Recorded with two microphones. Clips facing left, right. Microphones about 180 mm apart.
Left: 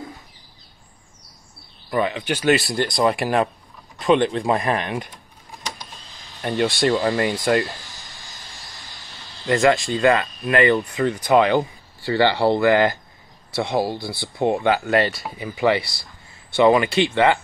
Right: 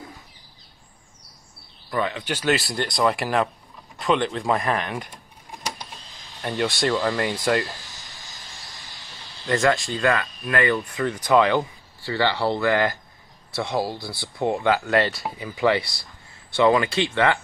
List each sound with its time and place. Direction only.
1.9 s speech: 15° left (ahead or behind)
6.4 s speech: 25° left (ahead or behind)
9.5 s speech: 15° left (ahead or behind)